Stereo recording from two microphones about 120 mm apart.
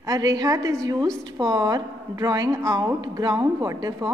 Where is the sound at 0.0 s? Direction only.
30° right (ahead or behind).